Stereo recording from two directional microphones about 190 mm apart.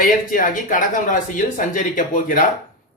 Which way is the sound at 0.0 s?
45° left (ahead or behind).